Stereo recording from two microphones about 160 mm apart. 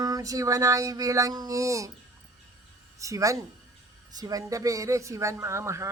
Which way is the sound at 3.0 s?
20° right (ahead or behind).